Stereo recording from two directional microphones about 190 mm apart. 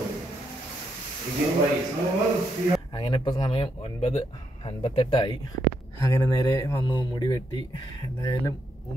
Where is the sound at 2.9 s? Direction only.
25° left (ahead or behind).